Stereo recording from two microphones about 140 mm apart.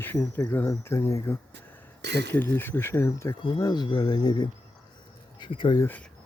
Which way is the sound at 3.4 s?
30° left (ahead or behind).